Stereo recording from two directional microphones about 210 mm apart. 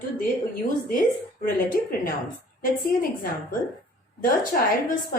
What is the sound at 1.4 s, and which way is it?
A woman's voice, 40° left (ahead or behind).